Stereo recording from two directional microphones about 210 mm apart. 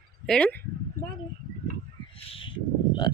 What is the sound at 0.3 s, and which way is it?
Speech, 5° left (ahead or behind).